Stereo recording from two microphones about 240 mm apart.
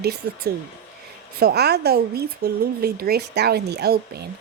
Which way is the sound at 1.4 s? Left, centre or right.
Right.